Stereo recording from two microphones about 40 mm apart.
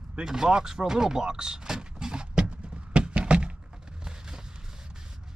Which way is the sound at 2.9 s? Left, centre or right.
Right.